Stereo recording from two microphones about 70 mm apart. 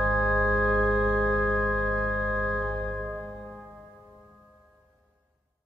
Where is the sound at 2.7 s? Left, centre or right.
Centre.